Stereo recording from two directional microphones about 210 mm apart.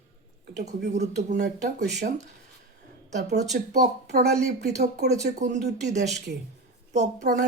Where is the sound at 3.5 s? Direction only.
45° right (ahead or behind).